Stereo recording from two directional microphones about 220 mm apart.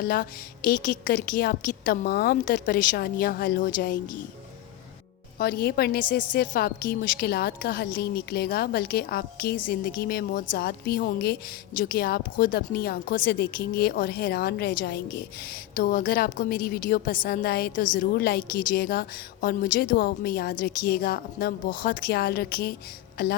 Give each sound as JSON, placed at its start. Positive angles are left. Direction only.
{"t": 0.0, "sound": "a woman's voice", "side_deg": 40}
{"t": 5.4, "sound": "a woman's voice", "side_deg": 45}